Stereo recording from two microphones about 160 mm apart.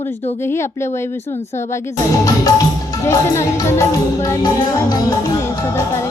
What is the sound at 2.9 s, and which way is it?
Music, 20° left (ahead or behind).